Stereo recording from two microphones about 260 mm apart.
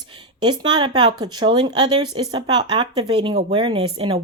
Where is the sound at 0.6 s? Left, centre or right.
Centre.